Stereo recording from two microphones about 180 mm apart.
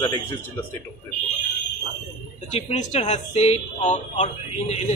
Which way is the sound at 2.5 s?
35° left (ahead or behind).